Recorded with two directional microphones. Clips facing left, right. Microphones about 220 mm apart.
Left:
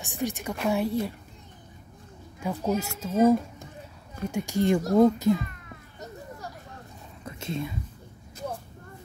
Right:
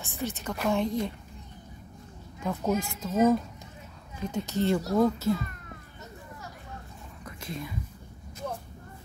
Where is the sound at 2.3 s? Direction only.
10° left (ahead or behind).